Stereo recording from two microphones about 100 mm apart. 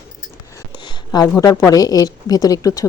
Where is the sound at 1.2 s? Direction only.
30° left (ahead or behind).